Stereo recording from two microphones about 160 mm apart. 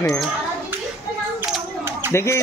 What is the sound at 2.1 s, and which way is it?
Speech, 15° left (ahead or behind).